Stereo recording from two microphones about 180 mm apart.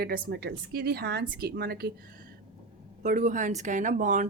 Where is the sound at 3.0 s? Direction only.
45° right (ahead or behind).